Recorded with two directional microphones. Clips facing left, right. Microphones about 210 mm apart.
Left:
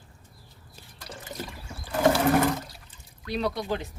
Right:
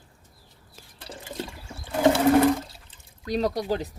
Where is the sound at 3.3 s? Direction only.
40° right (ahead or behind).